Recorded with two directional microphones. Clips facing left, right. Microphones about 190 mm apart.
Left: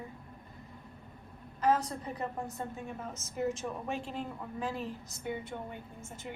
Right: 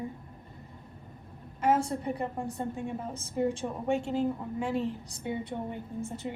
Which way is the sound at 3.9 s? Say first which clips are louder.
Right 13 dB; 90° right.